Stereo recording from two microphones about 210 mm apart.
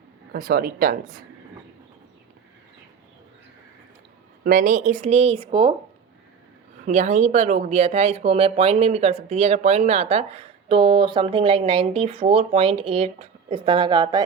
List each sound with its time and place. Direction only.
0.3 s speech: 45° right (ahead or behind)
4.4 s speech: 40° right (ahead or behind); by 5.7 s 25° right (ahead or behind)
6.8 s speech: 35° right (ahead or behind); by 14.3 s 20° right (ahead or behind)